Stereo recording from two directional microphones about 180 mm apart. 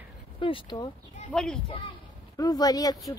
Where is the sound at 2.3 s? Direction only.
20° left (ahead or behind).